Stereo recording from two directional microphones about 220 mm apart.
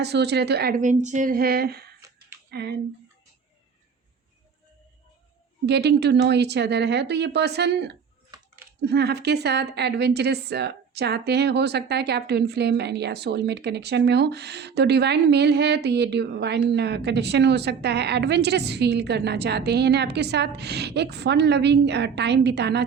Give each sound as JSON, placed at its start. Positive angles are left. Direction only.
{"t": 0.0, "sound": "a woman's voice", "side_deg": -50}
{"t": 5.6, "sound": "a woman's voice", "side_deg": -50}